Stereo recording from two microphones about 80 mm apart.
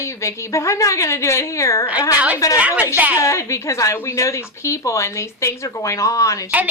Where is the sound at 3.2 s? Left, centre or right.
Left.